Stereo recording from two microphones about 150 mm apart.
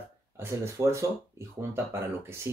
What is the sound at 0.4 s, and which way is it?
Speech, 20° right (ahead or behind).